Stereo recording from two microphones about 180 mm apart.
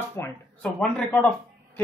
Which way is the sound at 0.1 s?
10° left (ahead or behind).